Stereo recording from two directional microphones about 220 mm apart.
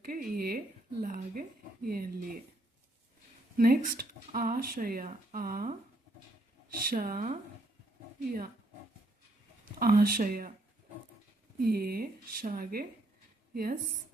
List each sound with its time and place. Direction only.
0.0 s speech: 40° right (ahead or behind)
3.6 s speech: 40° right (ahead or behind)
6.7 s speech: 40° right (ahead or behind)
9.7 s speech: 40° right (ahead or behind)
11.6 s a woman's voice: 45° right (ahead or behind)